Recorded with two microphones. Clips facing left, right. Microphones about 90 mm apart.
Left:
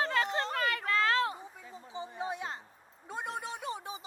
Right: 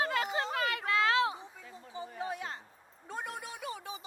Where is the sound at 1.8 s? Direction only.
20° left (ahead or behind).